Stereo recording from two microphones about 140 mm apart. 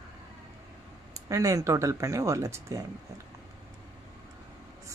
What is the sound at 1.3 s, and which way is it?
Speech, 25° right (ahead or behind).